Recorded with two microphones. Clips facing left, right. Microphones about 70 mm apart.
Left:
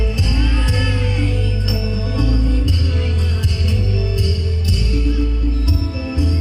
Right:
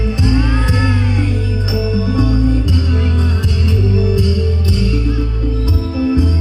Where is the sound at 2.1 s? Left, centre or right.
Right.